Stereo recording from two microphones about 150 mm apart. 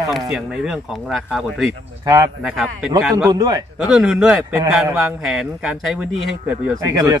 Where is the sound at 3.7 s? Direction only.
Centre (ahead or behind).